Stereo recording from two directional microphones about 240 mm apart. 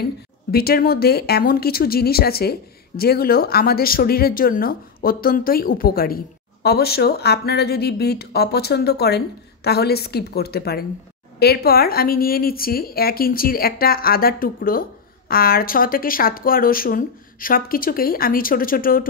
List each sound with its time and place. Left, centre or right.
0.0 s speech: left